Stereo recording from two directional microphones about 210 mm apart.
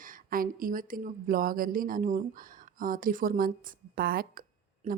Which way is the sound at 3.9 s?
45° right (ahead or behind).